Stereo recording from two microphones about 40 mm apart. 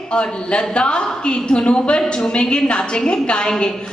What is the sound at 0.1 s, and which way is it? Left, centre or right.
A woman's voice, left.